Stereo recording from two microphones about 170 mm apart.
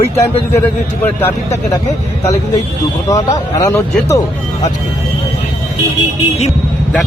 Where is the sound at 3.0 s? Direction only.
20° left (ahead or behind).